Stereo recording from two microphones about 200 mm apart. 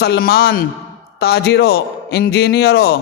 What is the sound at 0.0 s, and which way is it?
A man's voice, 50° left (ahead or behind).